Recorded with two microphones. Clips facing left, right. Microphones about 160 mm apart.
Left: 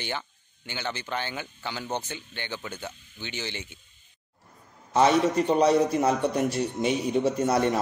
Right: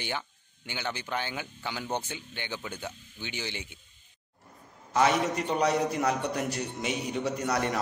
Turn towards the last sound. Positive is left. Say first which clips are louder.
# left 5 dB
turn(degrees=20)  # may be behind; listen again after turning